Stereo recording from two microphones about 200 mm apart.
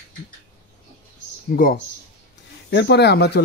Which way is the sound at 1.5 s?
45° left (ahead or behind).